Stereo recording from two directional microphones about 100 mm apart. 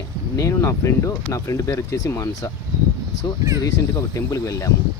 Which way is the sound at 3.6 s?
35° left (ahead or behind).